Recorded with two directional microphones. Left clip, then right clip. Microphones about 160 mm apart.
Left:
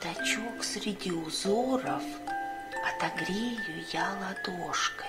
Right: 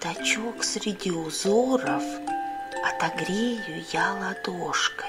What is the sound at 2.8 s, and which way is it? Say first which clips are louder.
Speech: right 5 dB; 25° right (ahead or behind).